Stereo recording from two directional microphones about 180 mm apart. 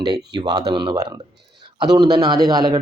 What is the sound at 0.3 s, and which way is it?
A man's voice, 25° right (ahead or behind).